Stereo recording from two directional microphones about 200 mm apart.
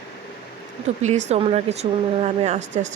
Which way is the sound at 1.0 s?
35° right (ahead or behind).